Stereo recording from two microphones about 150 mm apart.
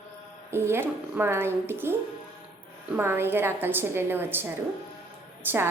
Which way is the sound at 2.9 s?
15° right (ahead or behind).